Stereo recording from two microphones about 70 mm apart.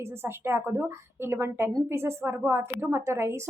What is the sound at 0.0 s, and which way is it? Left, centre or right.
A woman's voice, right.